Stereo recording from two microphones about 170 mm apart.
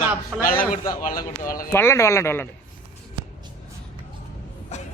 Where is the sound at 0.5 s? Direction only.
55° left (ahead or behind).